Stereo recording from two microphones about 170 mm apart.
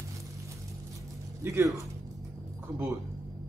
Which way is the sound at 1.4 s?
20° right (ahead or behind).